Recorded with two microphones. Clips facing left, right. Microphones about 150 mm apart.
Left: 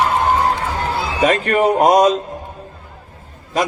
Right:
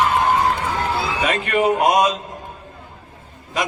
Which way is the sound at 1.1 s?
35° left (ahead or behind).